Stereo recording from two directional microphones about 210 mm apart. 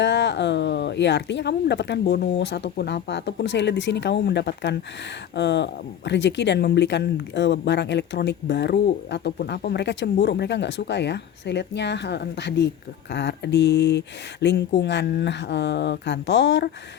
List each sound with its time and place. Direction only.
0.0 s speech: 55° left (ahead or behind)